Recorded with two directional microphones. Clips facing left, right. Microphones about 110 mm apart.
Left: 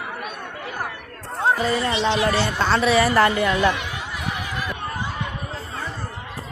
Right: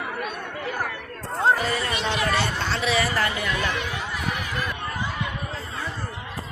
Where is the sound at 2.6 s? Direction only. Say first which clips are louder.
Left 6 dB; 45° left (ahead or behind).